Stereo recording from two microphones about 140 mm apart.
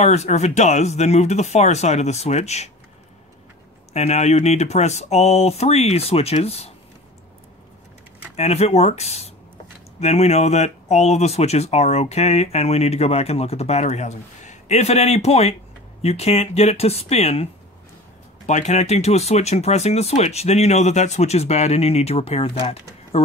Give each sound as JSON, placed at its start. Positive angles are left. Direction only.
{"t": 0.0, "sound": "speech", "side_deg": 55}
{"t": 3.9, "sound": "speech", "side_deg": 50}
{"t": 8.4, "sound": "speech", "side_deg": 50}
{"t": 18.5, "sound": "speech", "side_deg": 55}